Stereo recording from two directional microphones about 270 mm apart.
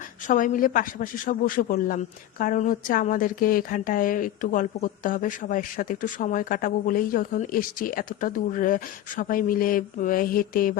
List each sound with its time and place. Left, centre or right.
0.3 s a woman's voice: left